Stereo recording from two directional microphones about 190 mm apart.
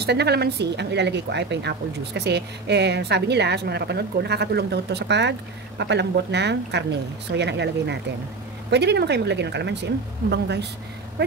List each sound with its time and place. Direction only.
0.0 s a woman's voice: 60° right (ahead or behind)